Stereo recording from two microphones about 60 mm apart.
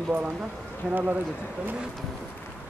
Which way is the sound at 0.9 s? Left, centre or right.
Right.